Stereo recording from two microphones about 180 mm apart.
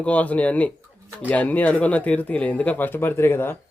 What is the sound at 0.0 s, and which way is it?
A man's voice, 10° left (ahead or behind).